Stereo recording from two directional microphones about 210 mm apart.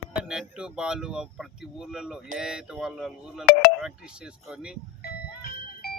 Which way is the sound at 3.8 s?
5° right (ahead or behind).